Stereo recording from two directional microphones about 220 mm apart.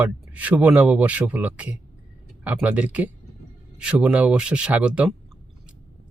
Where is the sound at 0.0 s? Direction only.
5° right (ahead or behind).